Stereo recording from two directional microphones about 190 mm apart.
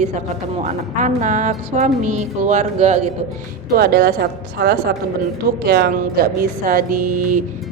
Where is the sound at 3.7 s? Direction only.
55° right (ahead or behind).